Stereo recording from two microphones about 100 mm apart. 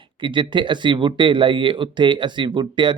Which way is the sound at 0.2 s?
55° right (ahead or behind).